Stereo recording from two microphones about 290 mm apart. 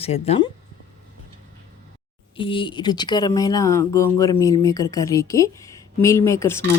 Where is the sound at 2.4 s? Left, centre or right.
Centre.